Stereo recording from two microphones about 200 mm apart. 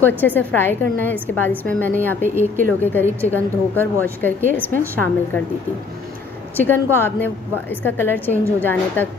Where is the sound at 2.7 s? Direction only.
10° left (ahead or behind).